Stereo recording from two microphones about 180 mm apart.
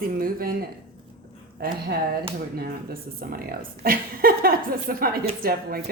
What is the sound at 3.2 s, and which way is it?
A woman's voice, 55° right (ahead or behind).